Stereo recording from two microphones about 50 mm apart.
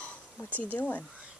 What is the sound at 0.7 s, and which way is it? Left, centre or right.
Speech, left.